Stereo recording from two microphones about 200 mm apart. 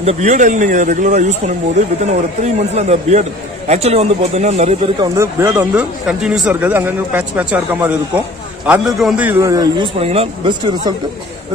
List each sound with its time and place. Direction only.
0.0 s a man's voice: 35° right (ahead or behind)
2.4 s a man's voice: 35° right (ahead or behind)
5.0 s speech: 15° right (ahead or behind)